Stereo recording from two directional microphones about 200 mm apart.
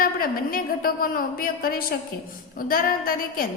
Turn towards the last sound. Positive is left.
turn(degrees=45)  # may be behind; listen again after turning